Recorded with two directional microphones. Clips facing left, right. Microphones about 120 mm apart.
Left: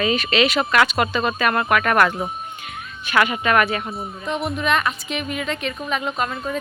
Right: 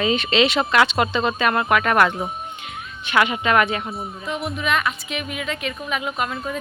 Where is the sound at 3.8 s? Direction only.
Centre (ahead or behind).